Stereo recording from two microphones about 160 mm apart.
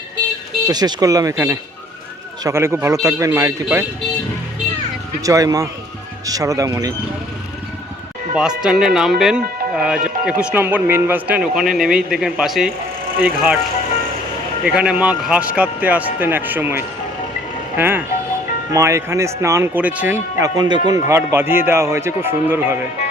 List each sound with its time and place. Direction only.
0.7 s speech: 25° right (ahead or behind)
5.2 s speech: 20° right (ahead or behind)
8.4 s speech: 5° right (ahead or behind)
14.6 s speech: 5° right (ahead or behind)
20.4 s speech: 25° right (ahead or behind)